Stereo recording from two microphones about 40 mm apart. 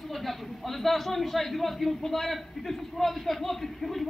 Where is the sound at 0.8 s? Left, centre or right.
Centre.